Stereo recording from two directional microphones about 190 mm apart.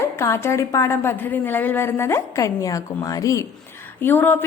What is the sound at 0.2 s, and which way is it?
A woman's voice, 15° left (ahead or behind).